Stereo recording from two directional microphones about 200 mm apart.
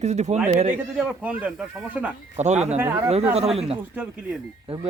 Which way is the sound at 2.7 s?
10° right (ahead or behind).